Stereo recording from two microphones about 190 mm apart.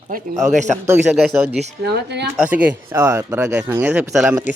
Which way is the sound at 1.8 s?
60° right (ahead or behind).